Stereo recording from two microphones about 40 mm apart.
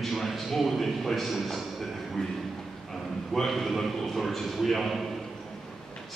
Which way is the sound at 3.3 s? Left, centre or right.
Centre.